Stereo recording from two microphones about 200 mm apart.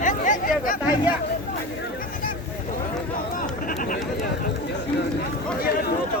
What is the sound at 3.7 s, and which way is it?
Speech, 45° left (ahead or behind).